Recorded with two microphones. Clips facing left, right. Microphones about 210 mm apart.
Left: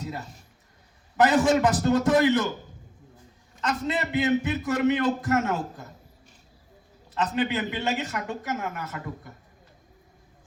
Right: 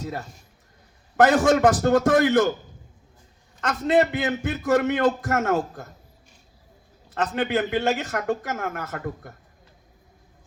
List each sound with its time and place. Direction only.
1.1 s a man's voice: 50° right (ahead or behind)
3.6 s a man's voice: 50° right (ahead or behind)
7.1 s a man's voice: 50° right (ahead or behind)